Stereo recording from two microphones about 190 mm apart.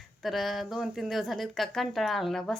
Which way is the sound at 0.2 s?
Centre (ahead or behind).